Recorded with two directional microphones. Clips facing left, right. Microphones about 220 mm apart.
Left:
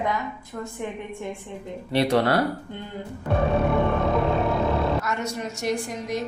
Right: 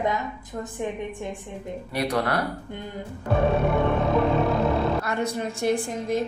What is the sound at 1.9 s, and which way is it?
Speech, 30° left (ahead or behind).